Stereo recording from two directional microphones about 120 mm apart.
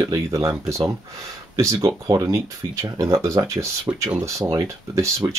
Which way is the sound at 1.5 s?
30° right (ahead or behind).